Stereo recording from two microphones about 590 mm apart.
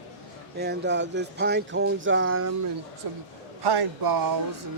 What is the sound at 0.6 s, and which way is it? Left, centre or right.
Speech, centre.